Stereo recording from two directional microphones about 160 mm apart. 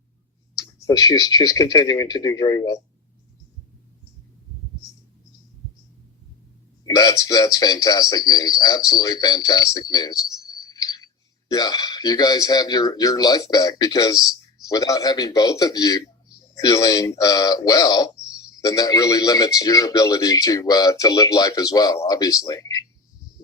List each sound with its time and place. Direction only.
0.8 s a man's voice: 20° left (ahead or behind)
6.8 s a man's voice: 20° left (ahead or behind)
10.4 s a sound: 25° left (ahead or behind)
11.5 s a man's voice: 25° left (ahead or behind)